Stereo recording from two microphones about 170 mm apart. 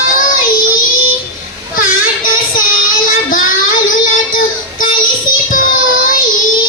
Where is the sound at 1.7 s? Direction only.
55° left (ahead or behind).